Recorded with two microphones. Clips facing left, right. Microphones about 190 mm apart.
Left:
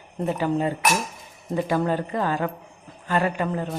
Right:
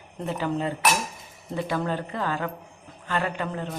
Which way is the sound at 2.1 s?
40° left (ahead or behind).